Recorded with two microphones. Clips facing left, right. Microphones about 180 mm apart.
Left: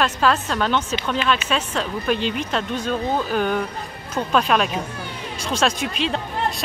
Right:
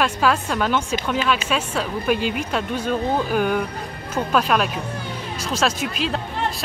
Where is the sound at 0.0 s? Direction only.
10° right (ahead or behind).